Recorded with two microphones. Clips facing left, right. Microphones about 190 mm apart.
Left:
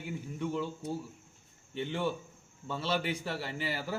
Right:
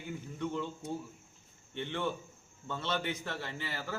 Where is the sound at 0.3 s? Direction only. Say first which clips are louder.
Left 2 dB; 5° left (ahead or behind).